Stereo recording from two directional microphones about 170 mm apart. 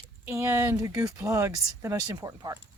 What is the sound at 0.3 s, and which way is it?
A woman's voice, 15° right (ahead or behind).